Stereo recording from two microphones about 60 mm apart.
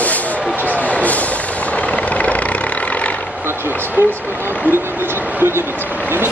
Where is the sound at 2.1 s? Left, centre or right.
Left.